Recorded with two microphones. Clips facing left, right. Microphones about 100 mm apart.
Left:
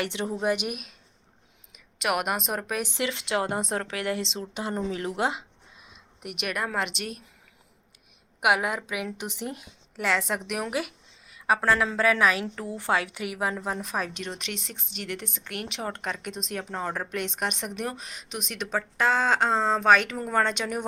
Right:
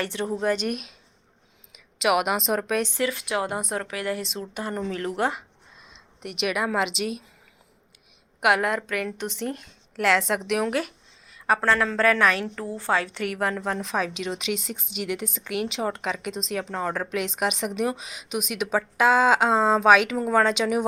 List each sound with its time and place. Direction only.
0.0 s a woman's voice: 20° left (ahead or behind)
1.7 s a woman's voice: centre (ahead or behind)
2.8 s speech: 20° left (ahead or behind)
6.2 s a woman's voice: centre (ahead or behind)
8.4 s a woman's voice: 5° left (ahead or behind)